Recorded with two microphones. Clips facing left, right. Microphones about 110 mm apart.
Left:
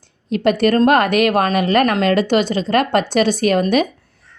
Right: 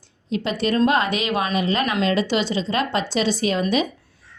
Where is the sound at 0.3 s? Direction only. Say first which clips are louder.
Left 8 dB; 60° left (ahead or behind).